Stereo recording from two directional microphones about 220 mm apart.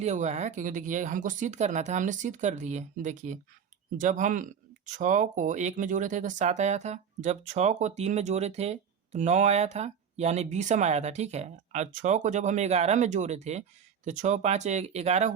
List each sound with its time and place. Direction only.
0.0 s speech: 30° right (ahead or behind)